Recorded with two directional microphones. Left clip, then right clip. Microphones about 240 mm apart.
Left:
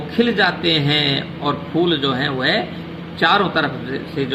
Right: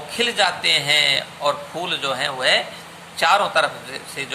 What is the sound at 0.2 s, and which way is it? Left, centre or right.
A man's voice, right.